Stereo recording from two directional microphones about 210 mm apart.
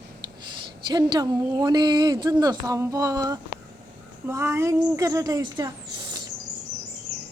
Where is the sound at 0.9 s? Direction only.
20° right (ahead or behind).